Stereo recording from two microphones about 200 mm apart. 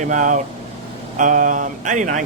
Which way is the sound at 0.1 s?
40° right (ahead or behind).